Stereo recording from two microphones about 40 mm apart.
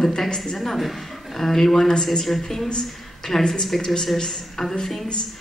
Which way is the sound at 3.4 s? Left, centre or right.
Centre.